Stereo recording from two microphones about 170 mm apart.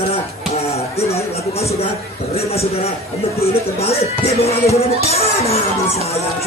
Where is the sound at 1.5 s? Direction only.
35° left (ahead or behind).